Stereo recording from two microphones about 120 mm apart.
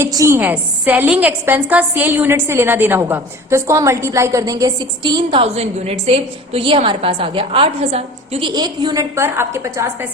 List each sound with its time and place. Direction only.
0.0 s a woman's voice: 25° right (ahead or behind)
9.1 s a woman's voice: 20° right (ahead or behind)